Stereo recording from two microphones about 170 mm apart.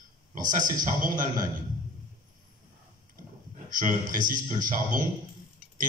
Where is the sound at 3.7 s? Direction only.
50° right (ahead or behind).